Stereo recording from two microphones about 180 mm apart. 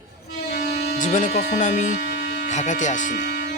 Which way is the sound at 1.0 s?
45° left (ahead or behind).